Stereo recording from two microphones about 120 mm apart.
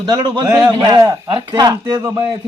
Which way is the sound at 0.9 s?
25° right (ahead or behind).